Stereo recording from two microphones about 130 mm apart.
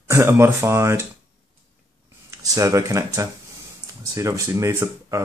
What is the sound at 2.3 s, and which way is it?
Speech, 25° right (ahead or behind).